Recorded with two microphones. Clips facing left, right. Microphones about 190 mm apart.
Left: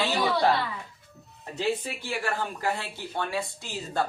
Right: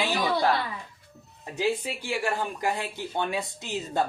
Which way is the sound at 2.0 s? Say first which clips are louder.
Right 2 dB; 15° right (ahead or behind).